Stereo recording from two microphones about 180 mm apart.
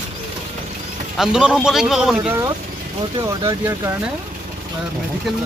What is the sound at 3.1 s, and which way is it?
Speech, 20° right (ahead or behind).